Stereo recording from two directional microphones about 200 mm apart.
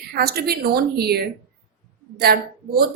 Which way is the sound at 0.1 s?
50° right (ahead or behind).